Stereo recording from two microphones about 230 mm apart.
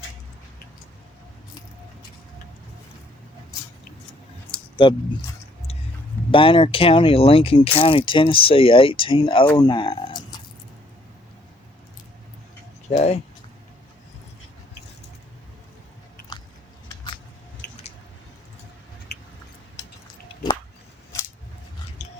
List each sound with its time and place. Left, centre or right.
4.5 s a sound: centre
6.3 s speech: left
9.6 s a sound: centre
12.9 s speech: left
20.2 s biting: centre
21.1 s scissors: centre
22.0 s music: left